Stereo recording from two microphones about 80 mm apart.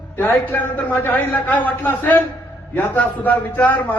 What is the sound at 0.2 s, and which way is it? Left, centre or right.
A man's voice, left.